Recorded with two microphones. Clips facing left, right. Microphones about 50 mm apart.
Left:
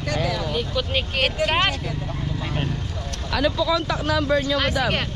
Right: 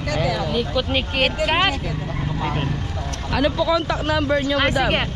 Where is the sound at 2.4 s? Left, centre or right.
Centre.